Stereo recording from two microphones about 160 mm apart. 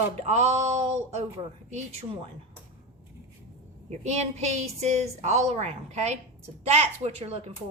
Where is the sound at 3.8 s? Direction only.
45° right (ahead or behind).